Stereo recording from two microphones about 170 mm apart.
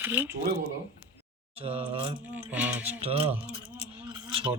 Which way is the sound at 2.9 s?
35° right (ahead or behind).